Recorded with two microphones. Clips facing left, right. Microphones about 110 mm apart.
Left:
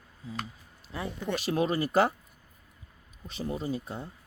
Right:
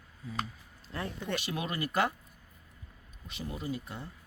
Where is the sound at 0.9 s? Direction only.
10° left (ahead or behind).